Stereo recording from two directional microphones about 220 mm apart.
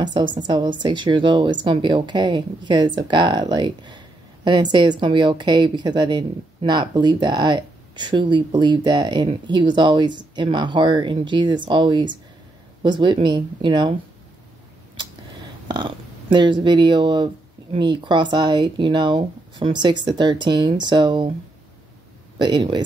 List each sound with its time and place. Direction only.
0.0 s a woman's voice: 20° right (ahead or behind)
15.7 s a woman's voice: 20° right (ahead or behind)
22.4 s a woman's voice: 20° right (ahead or behind)